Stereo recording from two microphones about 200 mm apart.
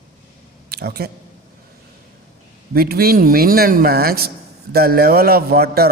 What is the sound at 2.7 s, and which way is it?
A man's voice, 50° right (ahead or behind).